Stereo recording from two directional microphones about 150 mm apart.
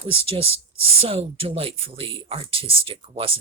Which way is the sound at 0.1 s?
40° right (ahead or behind).